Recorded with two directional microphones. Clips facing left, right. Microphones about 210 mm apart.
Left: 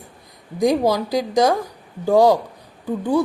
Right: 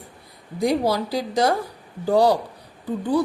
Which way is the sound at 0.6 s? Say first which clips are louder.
Left 3 dB; 15° left (ahead or behind).